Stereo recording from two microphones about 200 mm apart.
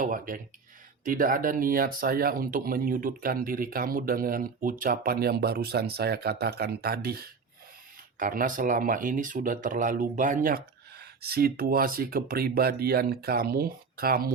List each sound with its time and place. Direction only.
0.0 s speech: 45° right (ahead or behind)